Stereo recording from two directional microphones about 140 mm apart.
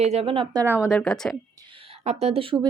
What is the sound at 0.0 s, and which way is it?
Speech, 50° right (ahead or behind).